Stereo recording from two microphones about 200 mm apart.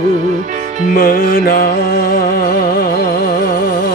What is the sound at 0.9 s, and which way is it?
Music, 50° left (ahead or behind).